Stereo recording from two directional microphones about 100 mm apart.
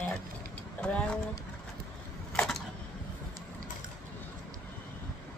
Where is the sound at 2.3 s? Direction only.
5° left (ahead or behind).